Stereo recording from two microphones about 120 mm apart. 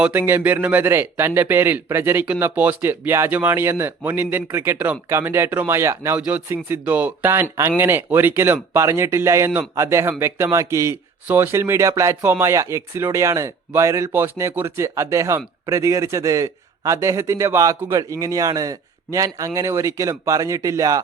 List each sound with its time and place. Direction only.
0.0 s speech: 15° right (ahead or behind)